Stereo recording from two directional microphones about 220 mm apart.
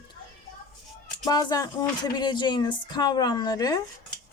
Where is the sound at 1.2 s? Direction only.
20° left (ahead or behind).